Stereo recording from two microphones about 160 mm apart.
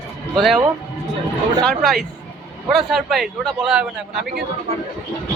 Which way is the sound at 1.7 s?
Centre (ahead or behind).